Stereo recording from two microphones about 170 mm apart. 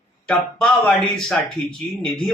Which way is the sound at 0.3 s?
5° left (ahead or behind).